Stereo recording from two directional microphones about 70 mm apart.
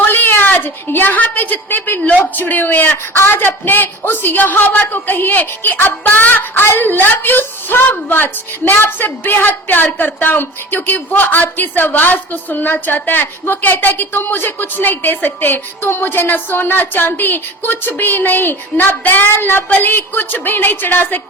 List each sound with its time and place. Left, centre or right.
0.0 s a woman's voice: left